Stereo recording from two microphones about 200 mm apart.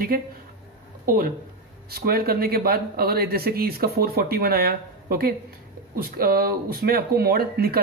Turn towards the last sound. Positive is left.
turn(degrees=-50)  # may be behind; listen again after turning